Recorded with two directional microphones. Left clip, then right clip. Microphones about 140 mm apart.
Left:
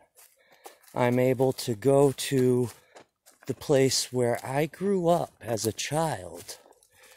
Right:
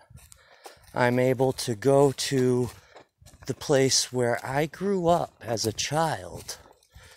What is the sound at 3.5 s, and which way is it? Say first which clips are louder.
Speech: right 1 dB; 15° left (ahead or behind).